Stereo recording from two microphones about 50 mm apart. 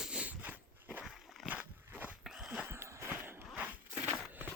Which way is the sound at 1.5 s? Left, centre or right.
Right.